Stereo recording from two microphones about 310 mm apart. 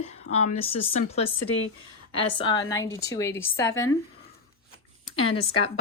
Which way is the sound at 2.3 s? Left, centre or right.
Centre.